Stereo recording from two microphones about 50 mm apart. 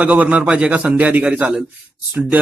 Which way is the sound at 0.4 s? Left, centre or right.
Right.